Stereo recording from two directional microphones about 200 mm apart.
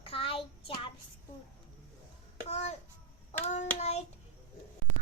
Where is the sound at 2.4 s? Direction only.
35° left (ahead or behind).